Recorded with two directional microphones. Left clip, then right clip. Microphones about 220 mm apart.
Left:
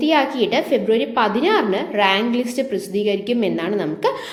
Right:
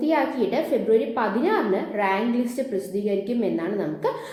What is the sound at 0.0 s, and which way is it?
A woman's voice, 30° left (ahead or behind).